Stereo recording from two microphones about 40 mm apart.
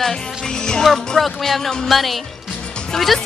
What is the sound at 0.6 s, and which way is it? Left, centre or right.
Speech, centre.